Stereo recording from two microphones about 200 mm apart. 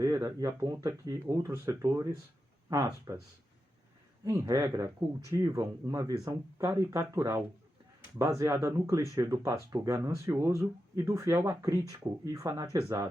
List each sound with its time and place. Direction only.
0.0 s speech: 15° right (ahead or behind)
4.3 s speech: 15° right (ahead or behind)